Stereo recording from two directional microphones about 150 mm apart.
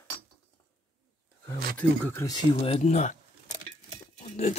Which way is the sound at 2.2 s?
25° left (ahead or behind).